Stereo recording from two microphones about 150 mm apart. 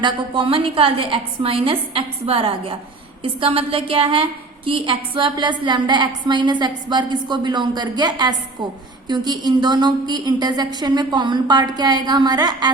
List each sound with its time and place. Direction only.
0.0 s a woman's voice: 35° right (ahead or behind)